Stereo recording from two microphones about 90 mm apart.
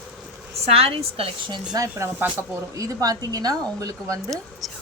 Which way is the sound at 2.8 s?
40° right (ahead or behind).